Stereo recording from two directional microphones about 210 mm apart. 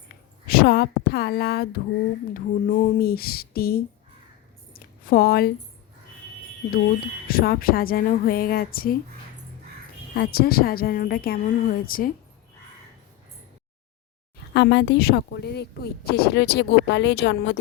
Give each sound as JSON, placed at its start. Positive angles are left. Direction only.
{"t": 0.4, "sound": "a woman's voice", "side_deg": 45}
{"t": 4.7, "sound": "a sound", "side_deg": 45}
{"t": 7.3, "sound": "speech", "side_deg": 45}
{"t": 10.2, "sound": "speech", "side_deg": 45}
{"t": 14.5, "sound": "speech", "side_deg": 55}